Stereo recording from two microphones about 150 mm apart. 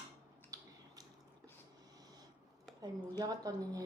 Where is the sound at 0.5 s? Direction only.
25° right (ahead or behind).